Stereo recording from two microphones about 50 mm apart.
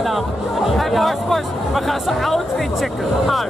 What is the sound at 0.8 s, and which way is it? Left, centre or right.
Music, centre.